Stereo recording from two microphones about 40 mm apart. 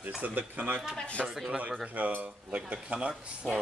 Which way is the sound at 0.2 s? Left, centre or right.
Right.